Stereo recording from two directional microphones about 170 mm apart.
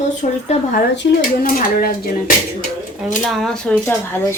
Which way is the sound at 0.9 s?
75° left (ahead or behind).